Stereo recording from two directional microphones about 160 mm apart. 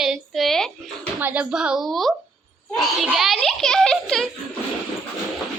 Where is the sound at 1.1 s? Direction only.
10° right (ahead or behind).